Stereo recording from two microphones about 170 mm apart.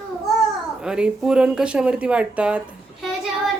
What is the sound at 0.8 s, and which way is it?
Speech, 5° right (ahead or behind).